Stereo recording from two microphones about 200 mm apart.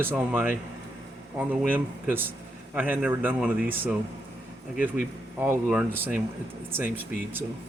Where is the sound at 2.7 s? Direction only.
5° right (ahead or behind).